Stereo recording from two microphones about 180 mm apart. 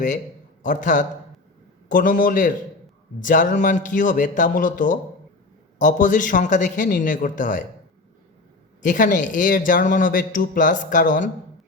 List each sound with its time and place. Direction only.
0.6 s a man's voice: 45° left (ahead or behind)
8.8 s a man's voice: 45° left (ahead or behind)